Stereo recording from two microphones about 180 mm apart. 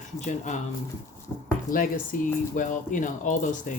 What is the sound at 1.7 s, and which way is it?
Speech, 50° left (ahead or behind).